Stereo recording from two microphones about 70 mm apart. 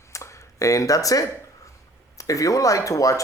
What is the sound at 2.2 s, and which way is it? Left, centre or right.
Speech, left.